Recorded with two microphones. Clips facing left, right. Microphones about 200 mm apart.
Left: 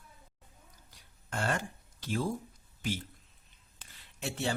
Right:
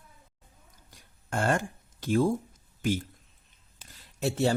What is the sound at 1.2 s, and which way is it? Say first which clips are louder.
Speech: right 6 dB; 50° right (ahead or behind).